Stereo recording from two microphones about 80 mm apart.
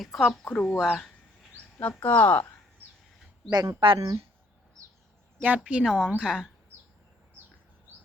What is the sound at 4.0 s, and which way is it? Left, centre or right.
Speech, right.